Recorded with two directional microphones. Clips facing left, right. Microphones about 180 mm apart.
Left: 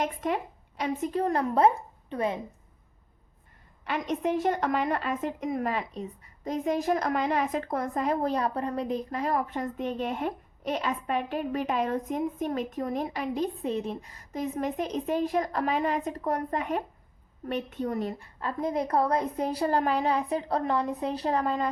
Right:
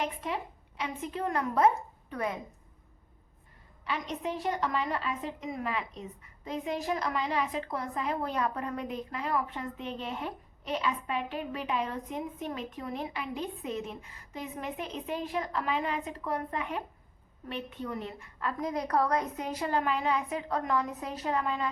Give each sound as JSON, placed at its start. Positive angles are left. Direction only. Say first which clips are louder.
{"t": 0.0, "sound": "a woman's voice", "louder": "left 5 dB", "side_deg": 45}
{"t": 3.8, "sound": "a woman's voice", "louder": "left 6 dB", "side_deg": 50}